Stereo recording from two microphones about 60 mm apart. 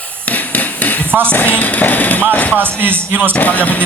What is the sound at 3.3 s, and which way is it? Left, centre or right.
Music, left.